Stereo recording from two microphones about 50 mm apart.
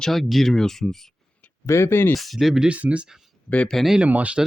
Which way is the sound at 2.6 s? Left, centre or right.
Right.